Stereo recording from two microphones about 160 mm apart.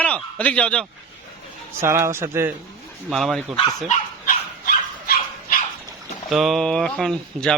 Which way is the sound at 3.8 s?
60° left (ahead or behind).